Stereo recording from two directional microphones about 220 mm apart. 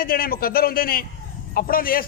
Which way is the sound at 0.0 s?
40° left (ahead or behind).